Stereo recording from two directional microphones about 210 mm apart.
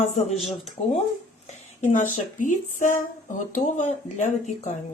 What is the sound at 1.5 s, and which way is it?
A woman's voice, 35° left (ahead or behind).